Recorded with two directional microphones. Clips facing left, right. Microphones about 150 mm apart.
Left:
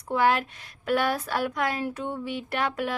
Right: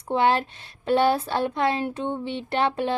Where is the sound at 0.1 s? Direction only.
30° right (ahead or behind).